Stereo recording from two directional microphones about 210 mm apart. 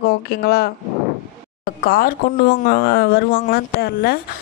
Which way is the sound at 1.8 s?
45° left (ahead or behind).